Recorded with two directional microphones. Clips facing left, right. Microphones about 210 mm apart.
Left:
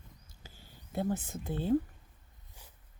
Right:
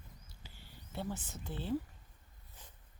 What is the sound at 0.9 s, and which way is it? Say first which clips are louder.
Speech: left 8 dB; 50° left (ahead or behind).